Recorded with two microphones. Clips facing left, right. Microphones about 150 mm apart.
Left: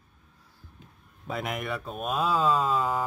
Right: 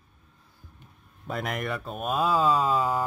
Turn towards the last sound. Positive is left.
turn(degrees=0)  # may be behind; listen again after turning